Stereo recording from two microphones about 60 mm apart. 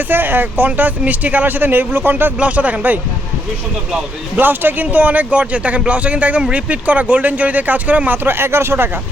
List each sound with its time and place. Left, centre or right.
0.1 s speech: right
2.4 s speech: right
4.4 s speech: right